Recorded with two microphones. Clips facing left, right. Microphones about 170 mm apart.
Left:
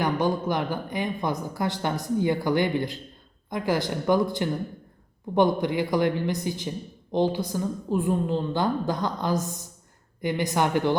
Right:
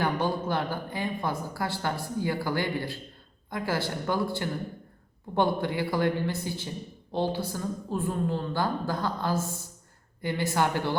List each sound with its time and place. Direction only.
0.0 s a woman's voice: 15° left (ahead or behind)